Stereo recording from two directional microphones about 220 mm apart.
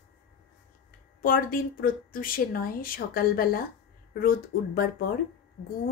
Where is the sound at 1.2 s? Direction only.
40° left (ahead or behind).